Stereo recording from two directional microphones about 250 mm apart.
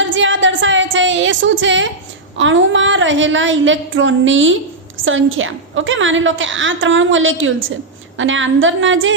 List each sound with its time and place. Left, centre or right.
0.0 s music: right
2.4 s a woman's voice: right